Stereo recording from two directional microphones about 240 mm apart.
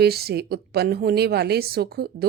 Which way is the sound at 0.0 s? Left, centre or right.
Right.